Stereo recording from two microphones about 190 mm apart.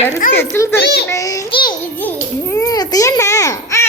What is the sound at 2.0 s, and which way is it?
Babbling, 15° left (ahead or behind).